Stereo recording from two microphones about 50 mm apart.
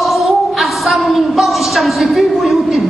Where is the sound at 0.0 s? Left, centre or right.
Centre.